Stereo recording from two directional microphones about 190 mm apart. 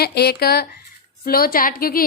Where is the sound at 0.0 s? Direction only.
55° left (ahead or behind).